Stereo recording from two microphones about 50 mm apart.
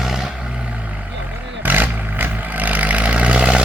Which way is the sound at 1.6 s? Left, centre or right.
Right.